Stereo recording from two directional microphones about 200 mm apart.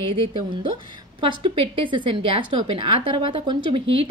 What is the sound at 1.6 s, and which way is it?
A woman's voice, 25° right (ahead or behind).